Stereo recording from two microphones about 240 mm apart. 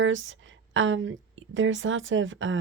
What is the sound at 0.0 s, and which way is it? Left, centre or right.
Speech, right.